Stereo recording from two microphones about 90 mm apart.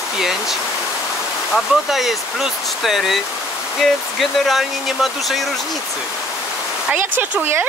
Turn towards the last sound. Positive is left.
turn(degrees=-20)  # may be behind; listen again after turning